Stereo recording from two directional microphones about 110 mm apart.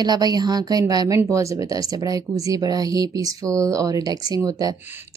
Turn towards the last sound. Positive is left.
turn(degrees=-35)  # may be behind; listen again after turning